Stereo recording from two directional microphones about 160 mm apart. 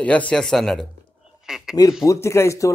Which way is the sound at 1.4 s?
5° right (ahead or behind).